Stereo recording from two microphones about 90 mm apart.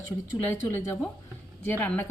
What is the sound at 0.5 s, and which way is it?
A woman's voice, 30° left (ahead or behind).